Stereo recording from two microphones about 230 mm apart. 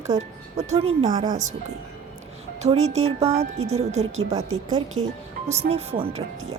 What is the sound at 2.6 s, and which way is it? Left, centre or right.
Speech, right.